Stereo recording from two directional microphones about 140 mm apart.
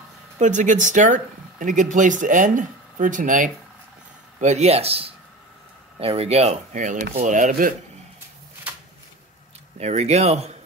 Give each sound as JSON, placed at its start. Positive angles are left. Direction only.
{"t": 0.4, "sound": "speech", "side_deg": -60}
{"t": 4.4, "sound": "speech", "side_deg": -55}
{"t": 9.8, "sound": "speech", "side_deg": -55}